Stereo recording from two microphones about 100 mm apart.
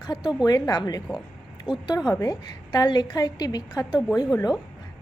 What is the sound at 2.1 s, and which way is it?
A woman's voice, 40° left (ahead or behind).